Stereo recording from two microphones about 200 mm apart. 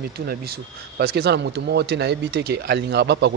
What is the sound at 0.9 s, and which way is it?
Speech, 55° right (ahead or behind).